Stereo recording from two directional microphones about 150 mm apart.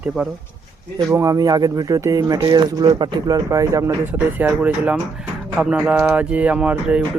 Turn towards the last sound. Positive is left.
turn(degrees=-5)  # may be behind; listen again after turning